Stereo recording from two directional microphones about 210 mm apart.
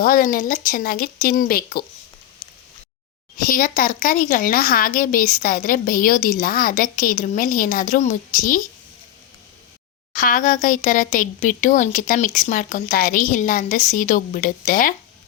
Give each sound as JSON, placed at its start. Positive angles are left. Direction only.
{"t": 0.0, "sound": "speech", "side_deg": 45}
{"t": 3.3, "sound": "speech", "side_deg": 40}
{"t": 10.1, "sound": "speech", "side_deg": 40}